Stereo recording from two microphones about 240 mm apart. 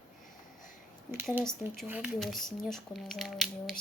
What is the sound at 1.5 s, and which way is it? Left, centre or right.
Speech, centre.